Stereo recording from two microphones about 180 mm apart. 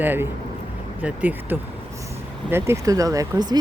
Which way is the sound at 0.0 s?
10° right (ahead or behind).